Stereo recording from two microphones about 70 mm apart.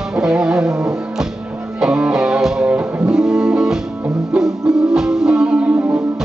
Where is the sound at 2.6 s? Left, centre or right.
Centre.